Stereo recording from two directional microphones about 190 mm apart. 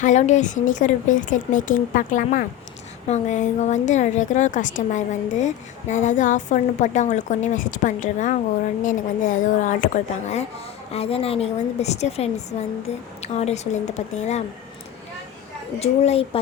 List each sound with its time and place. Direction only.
0.0 s a woman's voice: 40° left (ahead or behind)
15.8 s a woman's voice: 35° left (ahead or behind)